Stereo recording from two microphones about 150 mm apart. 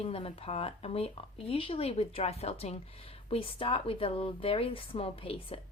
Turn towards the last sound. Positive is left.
turn(degrees=40)  # may be behind; listen again after turning